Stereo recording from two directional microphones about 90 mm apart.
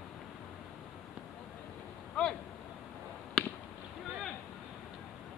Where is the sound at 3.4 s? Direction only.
5° left (ahead or behind).